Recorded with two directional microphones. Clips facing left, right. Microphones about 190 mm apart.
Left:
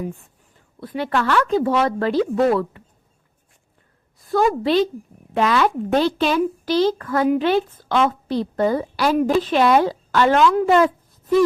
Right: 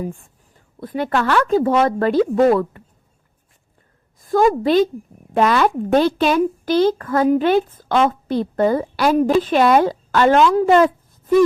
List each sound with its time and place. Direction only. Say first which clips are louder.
0.8 s a woman's voice: right 2 dB; 50° right (ahead or behind)
4.2 s a woman's voice: right 3 dB; 45° right (ahead or behind)
10.3 s a woman's voice: right 2 dB; 30° right (ahead or behind)